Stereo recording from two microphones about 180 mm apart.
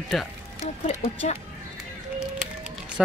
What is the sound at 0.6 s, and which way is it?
Speech, 40° left (ahead or behind).